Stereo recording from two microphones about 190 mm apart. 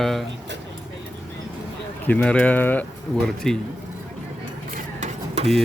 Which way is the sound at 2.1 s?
5° left (ahead or behind).